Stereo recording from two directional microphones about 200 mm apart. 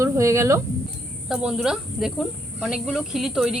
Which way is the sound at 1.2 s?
Centre (ahead or behind).